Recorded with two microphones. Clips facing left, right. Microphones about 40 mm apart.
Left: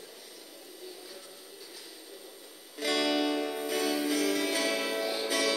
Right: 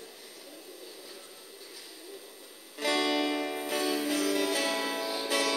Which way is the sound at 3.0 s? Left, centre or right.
Centre.